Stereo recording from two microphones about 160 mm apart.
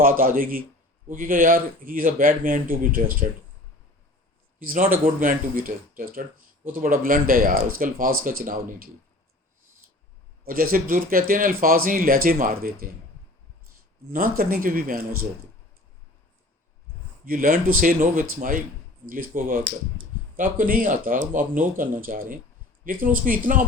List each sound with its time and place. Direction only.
0.0 s speech: 60° right (ahead or behind)
4.6 s speech: 60° right (ahead or behind)
10.4 s speech: 65° right (ahead or behind)
14.1 s speech: 65° right (ahead or behind)
17.2 s speech: 60° right (ahead or behind)